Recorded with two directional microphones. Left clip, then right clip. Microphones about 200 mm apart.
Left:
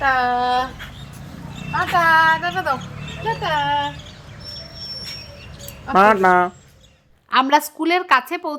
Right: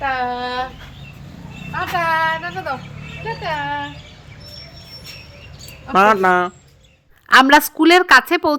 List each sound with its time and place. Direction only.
0.0 s speech: 5° left (ahead or behind)
1.7 s speech: 5° left (ahead or behind)
5.9 s speech: 10° right (ahead or behind)
7.3 s a woman's voice: 30° right (ahead or behind)